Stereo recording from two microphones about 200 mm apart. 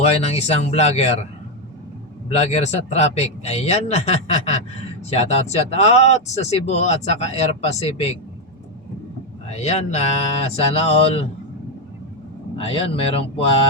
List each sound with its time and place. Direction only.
0.0 s speech: 30° left (ahead or behind)
2.3 s speech: 35° left (ahead or behind)
9.5 s speech: 35° left (ahead or behind)
12.5 s speech: 30° left (ahead or behind)